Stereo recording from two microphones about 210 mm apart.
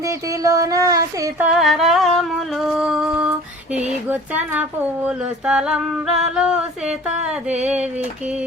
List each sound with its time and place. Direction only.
0.4 s child singing: 15° right (ahead or behind)
1.5 s humming: centre (ahead or behind)
3.8 s a sound: 5° right (ahead or behind)
7.6 s child singing: 5° right (ahead or behind)